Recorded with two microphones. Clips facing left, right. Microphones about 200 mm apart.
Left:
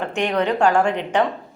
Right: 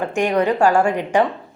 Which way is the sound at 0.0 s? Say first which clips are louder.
Right 3 dB; 10° right (ahead or behind).